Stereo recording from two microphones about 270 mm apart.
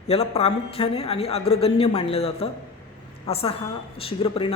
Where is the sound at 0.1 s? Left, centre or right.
Left.